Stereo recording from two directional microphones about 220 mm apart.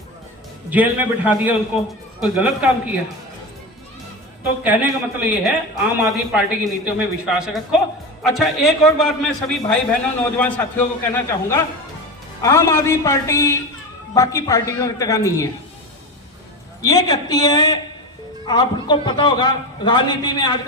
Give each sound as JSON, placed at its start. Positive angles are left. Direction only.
{"t": 0.7, "sound": "a man's voice", "side_deg": -5}
{"t": 4.6, "sound": "a man's voice", "side_deg": -5}
{"t": 16.8, "sound": "a man's voice", "side_deg": 15}